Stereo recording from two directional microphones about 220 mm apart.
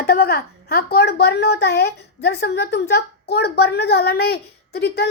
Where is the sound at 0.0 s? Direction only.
45° left (ahead or behind).